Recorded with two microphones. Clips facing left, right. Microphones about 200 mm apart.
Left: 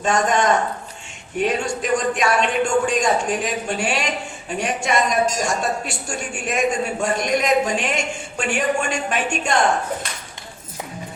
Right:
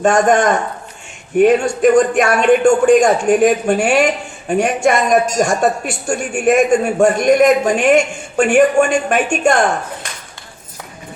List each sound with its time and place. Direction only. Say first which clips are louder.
0.0 s a man's voice: right 7 dB; 50° right (ahead or behind)